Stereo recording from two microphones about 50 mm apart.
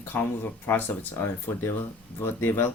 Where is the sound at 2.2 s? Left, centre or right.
Left.